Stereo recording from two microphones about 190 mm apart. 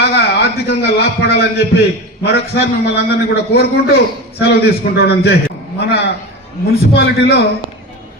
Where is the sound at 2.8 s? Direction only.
60° left (ahead or behind).